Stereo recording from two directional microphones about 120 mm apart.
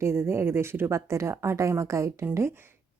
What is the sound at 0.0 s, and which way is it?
A woman's voice, 20° right (ahead or behind).